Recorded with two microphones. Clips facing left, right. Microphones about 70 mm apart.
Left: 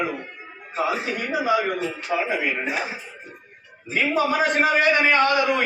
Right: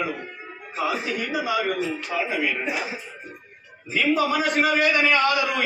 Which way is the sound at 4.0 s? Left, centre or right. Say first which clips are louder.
Left 1 dB; left.